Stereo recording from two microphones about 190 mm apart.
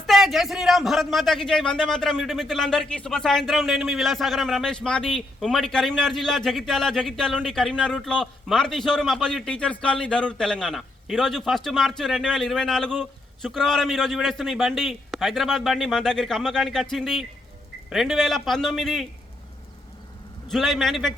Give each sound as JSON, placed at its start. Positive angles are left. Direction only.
{"t": 0.1, "sound": "a man's voice", "side_deg": 0}
{"t": 20.5, "sound": "a man's voice", "side_deg": 0}